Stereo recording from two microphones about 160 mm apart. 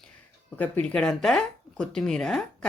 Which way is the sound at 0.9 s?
5° left (ahead or behind).